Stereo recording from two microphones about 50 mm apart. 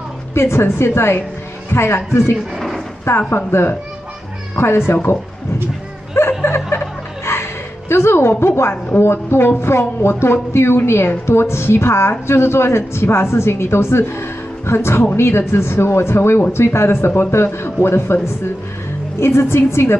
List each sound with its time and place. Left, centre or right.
0.3 s a woman's voice: left
2.5 s a sound: centre
3.1 s a woman's voice: left
6.4 s a sound: left
7.3 s music: left
7.9 s a woman's voice: left